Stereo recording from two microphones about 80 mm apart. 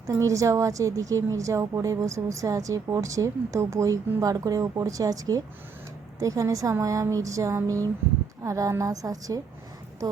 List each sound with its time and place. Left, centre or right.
0.1 s a woman's voice: right